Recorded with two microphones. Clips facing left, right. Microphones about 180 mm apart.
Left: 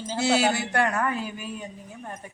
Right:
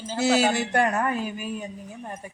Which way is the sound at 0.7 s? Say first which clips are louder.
Right 2 dB; 20° right (ahead or behind).